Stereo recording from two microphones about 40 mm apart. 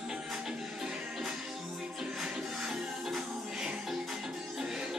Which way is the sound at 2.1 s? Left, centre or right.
Centre.